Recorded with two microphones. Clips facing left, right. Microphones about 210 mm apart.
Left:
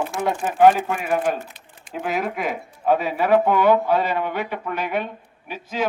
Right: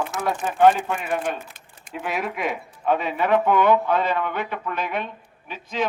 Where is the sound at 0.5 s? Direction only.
10° left (ahead or behind).